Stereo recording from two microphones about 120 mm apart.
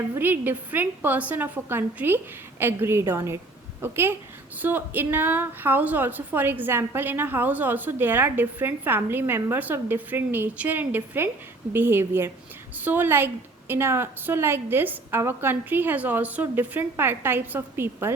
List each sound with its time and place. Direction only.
0.2 s a woman's voice: 15° right (ahead or behind)